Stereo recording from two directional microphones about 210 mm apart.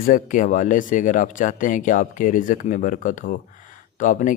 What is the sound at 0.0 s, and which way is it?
Speech, 40° left (ahead or behind).